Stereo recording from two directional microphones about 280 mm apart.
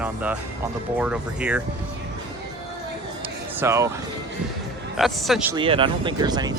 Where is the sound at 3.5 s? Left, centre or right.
Centre.